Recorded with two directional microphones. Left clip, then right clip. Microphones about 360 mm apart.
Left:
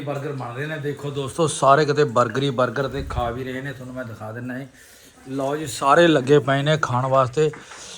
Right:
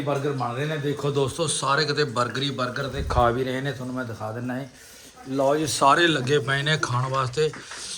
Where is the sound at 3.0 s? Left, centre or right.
Centre.